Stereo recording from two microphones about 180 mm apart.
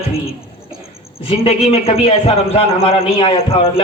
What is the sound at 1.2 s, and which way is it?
A man's voice, 35° left (ahead or behind).